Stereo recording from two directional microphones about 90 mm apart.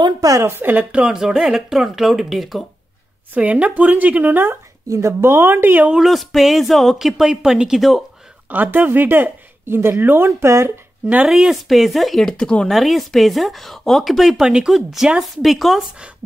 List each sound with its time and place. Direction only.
0.0 s a woman's voice: 45° right (ahead or behind)
0.4 s speech: 25° right (ahead or behind); by 2.6 s centre (ahead or behind)
3.3 s speech: 15° right (ahead or behind)
4.8 s speech: 35° right (ahead or behind)
5.9 s speech: centre (ahead or behind)
8.5 s speech: 20° right (ahead or behind)
11.2 s speech: 5° right (ahead or behind)